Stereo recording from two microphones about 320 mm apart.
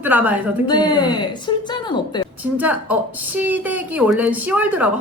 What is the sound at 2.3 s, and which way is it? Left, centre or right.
A woman's voice, centre.